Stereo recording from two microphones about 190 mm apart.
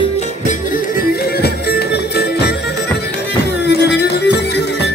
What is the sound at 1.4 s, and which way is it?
Music, 55° left (ahead or behind).